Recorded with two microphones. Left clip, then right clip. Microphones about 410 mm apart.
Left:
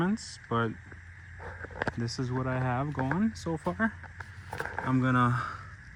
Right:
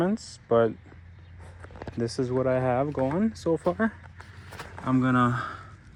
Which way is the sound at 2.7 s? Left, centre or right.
Right.